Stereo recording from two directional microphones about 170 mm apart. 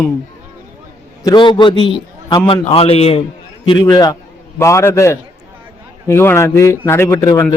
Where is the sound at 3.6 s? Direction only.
25° left (ahead or behind).